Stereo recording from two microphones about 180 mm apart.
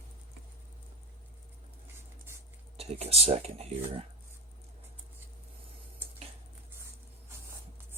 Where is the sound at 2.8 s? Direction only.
35° right (ahead or behind).